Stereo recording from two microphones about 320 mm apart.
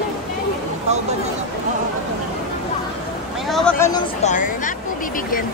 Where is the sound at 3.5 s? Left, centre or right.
Centre.